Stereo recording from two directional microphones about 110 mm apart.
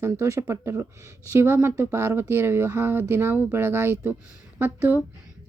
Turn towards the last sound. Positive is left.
turn(degrees=-20)  # may be behind; listen again after turning